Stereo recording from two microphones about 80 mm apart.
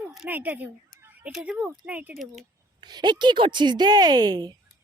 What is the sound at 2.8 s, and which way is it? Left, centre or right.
Speech, right.